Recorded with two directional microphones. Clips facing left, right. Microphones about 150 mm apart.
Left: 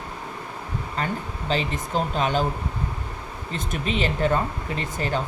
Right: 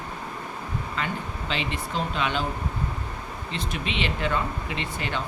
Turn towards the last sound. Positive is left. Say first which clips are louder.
# left 4 dB
turn(degrees=40)  # may be behind; listen again after turning